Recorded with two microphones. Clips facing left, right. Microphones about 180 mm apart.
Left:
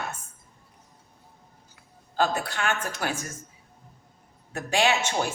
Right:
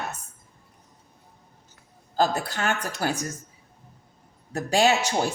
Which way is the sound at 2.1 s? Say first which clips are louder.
Right 2 dB; 40° right (ahead or behind).